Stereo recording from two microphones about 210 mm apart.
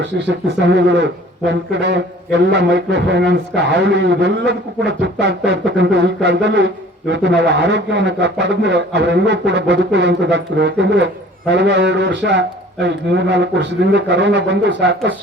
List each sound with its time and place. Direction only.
0.0 s a man's voice: 55° right (ahead or behind)